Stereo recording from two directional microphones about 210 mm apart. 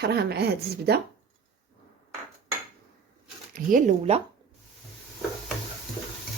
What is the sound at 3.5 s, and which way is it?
Speech, 35° right (ahead or behind).